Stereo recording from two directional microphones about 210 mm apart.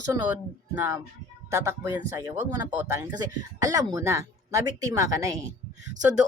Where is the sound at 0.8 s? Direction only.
10° right (ahead or behind).